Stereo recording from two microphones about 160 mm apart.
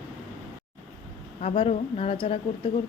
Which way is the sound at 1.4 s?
40° left (ahead or behind).